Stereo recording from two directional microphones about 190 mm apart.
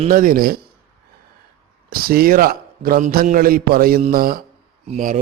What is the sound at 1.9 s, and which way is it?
A man's voice, 50° right (ahead or behind).